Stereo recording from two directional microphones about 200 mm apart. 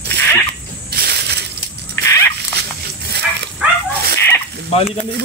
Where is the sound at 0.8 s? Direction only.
50° right (ahead or behind).